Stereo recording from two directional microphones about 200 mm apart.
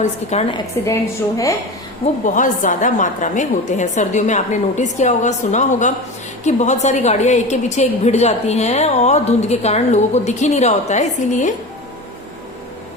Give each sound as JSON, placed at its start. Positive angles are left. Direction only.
{"t": 0.0, "sound": "a woman's voice", "side_deg": 35}
{"t": 0.8, "sound": "a woman's voice", "side_deg": 15}
{"t": 2.2, "sound": "a woman's voice", "side_deg": 40}